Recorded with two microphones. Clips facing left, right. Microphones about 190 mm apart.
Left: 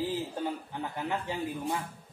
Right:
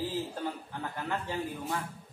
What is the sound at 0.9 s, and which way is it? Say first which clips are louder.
Speech: even; 15° left (ahead or behind).